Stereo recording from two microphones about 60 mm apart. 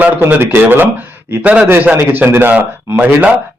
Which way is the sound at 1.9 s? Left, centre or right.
Right.